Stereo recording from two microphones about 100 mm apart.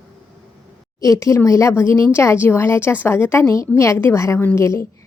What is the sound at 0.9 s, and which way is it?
A woman's voice, 35° left (ahead or behind).